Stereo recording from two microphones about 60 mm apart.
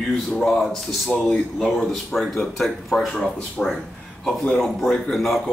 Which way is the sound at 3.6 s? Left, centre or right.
Left.